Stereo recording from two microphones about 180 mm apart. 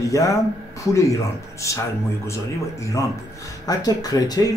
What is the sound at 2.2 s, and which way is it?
A man's voice, 15° left (ahead or behind).